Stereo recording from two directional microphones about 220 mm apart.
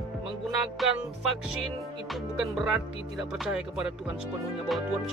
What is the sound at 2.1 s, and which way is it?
Speech, centre (ahead or behind).